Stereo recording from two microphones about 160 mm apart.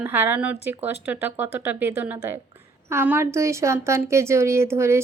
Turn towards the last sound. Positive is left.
turn(degrees=-15)  # may be behind; listen again after turning